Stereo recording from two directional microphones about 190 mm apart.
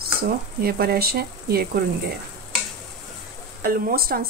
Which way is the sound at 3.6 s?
50° right (ahead or behind).